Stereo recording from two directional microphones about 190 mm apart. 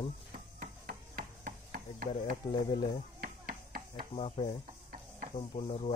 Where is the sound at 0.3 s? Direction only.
50° right (ahead or behind).